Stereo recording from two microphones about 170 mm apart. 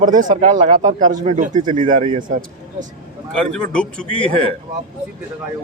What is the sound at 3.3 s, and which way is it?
Speech, 5° left (ahead or behind).